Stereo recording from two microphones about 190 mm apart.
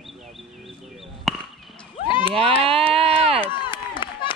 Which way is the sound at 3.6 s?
25° left (ahead or behind).